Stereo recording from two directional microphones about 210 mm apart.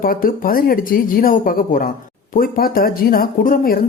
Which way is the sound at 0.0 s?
45° left (ahead or behind).